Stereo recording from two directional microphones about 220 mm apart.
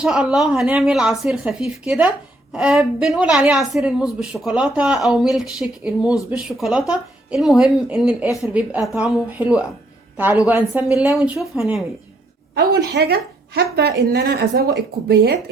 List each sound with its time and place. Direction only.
0.0 s a woman's voice: 5° right (ahead or behind)
12.5 s a woman's voice: 50° right (ahead or behind)